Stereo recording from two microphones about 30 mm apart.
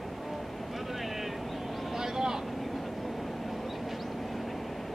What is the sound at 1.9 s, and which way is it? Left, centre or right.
Vehicle, centre.